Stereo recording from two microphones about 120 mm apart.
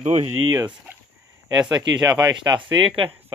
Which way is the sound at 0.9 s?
15° right (ahead or behind).